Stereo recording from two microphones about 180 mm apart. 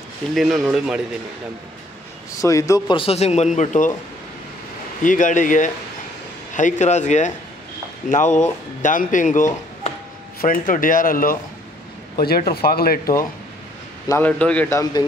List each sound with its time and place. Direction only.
0.3 s speech: centre (ahead or behind)
2.4 s speech: 20° left (ahead or behind)
3.0 s speech: 35° left (ahead or behind)
5.0 s speech: 45° left (ahead or behind)
14.0 s speech: 10° left (ahead or behind)